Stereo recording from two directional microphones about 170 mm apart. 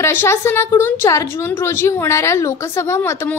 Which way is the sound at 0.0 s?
15° left (ahead or behind).